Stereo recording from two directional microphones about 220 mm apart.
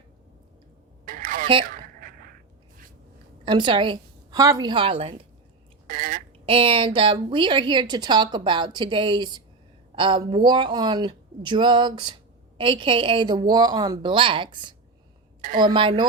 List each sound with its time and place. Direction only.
1.0 s a sound: 40° right (ahead or behind)
3.4 s a woman's voice: 20° right (ahead or behind)
5.9 s a sound: 40° right (ahead or behind)
6.4 s a woman's voice: 25° right (ahead or behind)
15.4 s a woman's voice: 40° right (ahead or behind)
15.6 s a woman's voice: 20° right (ahead or behind)